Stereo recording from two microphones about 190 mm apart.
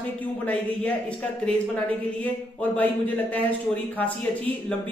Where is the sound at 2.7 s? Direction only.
10° left (ahead or behind).